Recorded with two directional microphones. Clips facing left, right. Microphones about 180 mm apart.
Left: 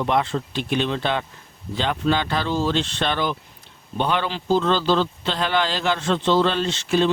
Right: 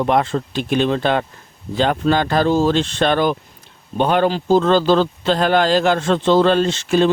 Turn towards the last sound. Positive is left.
turn(degrees=-45)  # may be behind; listen again after turning